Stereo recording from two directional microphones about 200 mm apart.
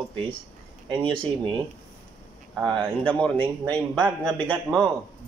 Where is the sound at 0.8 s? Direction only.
25° right (ahead or behind).